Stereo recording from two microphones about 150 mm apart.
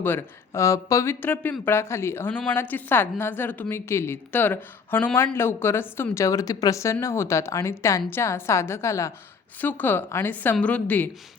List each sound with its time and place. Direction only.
0.0 s a woman's voice: 15° left (ahead or behind)